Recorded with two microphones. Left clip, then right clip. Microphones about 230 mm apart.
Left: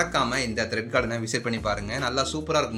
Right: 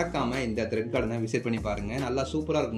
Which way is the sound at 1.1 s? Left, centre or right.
Left.